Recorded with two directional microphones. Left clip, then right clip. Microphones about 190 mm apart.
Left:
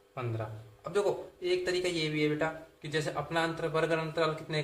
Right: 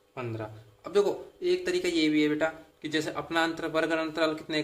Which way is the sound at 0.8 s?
35° right (ahead or behind).